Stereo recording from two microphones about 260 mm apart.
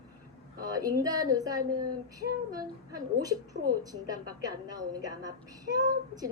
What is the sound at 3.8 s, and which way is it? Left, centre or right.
A woman's voice, centre.